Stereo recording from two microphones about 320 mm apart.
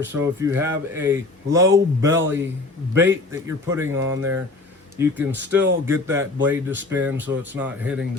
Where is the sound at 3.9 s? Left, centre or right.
Right.